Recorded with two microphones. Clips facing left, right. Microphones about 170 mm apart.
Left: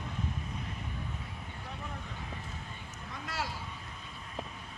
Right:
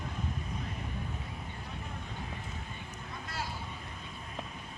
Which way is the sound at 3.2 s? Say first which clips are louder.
Left 3 dB; 85° left.